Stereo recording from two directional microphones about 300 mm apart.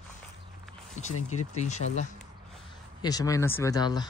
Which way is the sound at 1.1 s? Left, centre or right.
Left.